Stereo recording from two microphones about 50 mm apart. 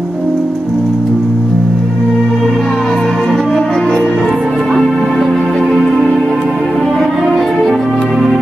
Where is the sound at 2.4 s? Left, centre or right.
Centre.